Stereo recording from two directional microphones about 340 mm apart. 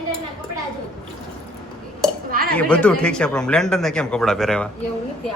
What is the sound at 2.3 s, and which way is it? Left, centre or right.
Dishes, right.